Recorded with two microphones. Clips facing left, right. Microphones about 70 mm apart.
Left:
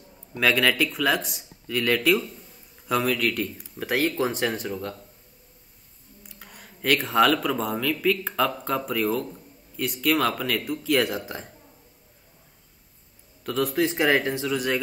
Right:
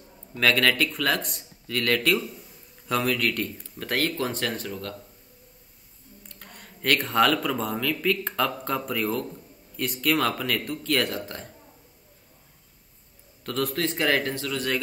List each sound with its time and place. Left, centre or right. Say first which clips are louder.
0.3 s a man's voice: even; centre
6.2 s a man's voice: even; centre
13.4 s a man's voice: left 3 dB; centre